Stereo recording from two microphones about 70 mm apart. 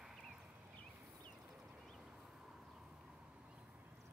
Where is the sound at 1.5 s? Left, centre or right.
Centre.